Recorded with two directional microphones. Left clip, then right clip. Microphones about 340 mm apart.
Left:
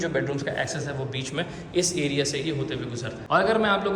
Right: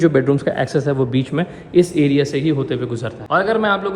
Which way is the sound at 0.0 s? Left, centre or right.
Centre.